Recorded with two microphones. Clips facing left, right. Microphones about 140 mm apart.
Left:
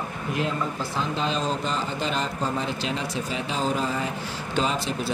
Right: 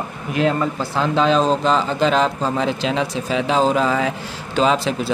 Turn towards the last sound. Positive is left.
turn(degrees=-90)